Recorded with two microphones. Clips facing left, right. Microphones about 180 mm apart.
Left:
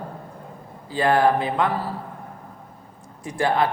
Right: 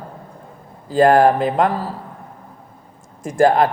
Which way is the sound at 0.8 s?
45° right (ahead or behind).